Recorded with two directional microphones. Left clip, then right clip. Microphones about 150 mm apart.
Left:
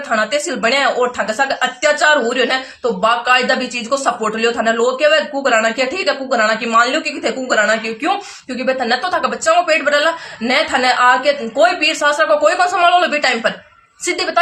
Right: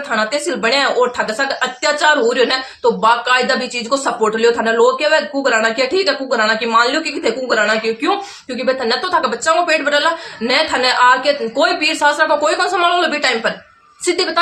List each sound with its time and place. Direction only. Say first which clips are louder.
0.1 s speech: left 1 dB; 25° right (ahead or behind)